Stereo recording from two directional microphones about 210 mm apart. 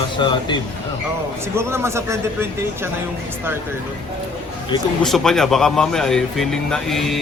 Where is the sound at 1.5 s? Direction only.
10° right (ahead or behind).